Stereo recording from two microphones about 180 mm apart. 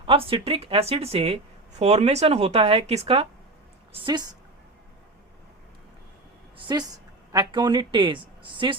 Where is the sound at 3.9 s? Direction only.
25° right (ahead or behind).